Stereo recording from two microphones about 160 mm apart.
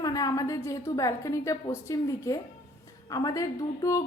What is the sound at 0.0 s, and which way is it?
A woman's voice, 20° left (ahead or behind).